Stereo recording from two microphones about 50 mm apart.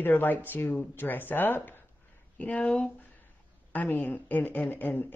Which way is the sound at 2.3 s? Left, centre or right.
Left.